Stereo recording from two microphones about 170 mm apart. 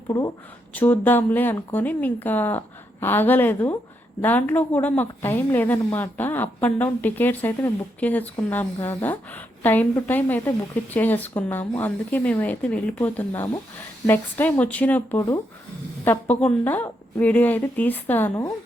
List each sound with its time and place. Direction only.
0.1 s a woman's voice: 20° left (ahead or behind)
0.7 s a woman's voice: 10° left (ahead or behind)